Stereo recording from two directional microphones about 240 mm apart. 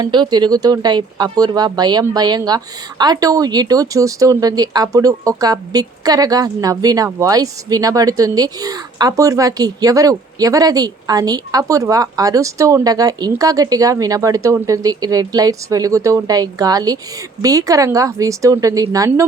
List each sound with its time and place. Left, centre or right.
0.0 s speech: centre